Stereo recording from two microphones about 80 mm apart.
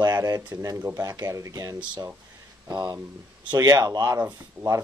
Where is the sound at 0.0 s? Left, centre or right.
Right.